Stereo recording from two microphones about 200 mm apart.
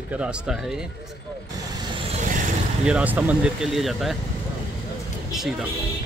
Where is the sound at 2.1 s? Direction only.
40° right (ahead or behind).